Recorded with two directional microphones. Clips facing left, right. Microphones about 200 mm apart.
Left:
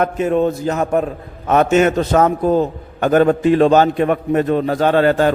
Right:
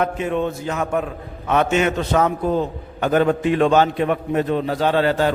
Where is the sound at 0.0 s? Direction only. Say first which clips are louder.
Left 5 dB; 40° left (ahead or behind).